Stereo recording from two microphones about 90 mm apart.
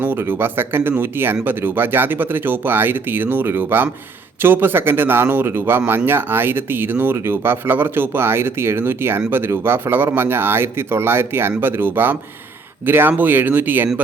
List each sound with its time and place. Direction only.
0.0 s speech: 25° right (ahead or behind)